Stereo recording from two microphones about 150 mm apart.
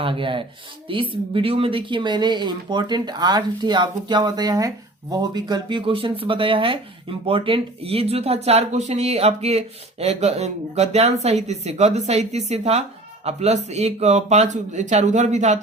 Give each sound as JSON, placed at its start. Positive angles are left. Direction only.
{"t": 0.0, "sound": "speech", "side_deg": -35}